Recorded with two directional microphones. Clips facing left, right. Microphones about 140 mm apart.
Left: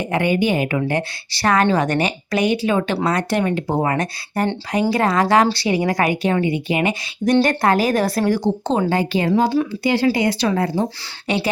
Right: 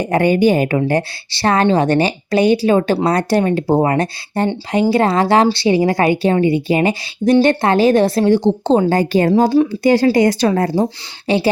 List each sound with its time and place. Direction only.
0.0 s a woman's voice: 40° right (ahead or behind)
8.9 s speech: 40° right (ahead or behind)
11.3 s speech: 30° right (ahead or behind)